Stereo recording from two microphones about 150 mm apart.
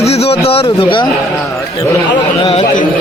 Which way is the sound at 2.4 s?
35° left (ahead or behind).